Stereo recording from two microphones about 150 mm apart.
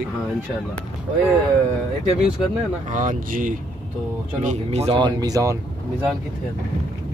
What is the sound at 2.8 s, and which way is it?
Speech, 60° right (ahead or behind).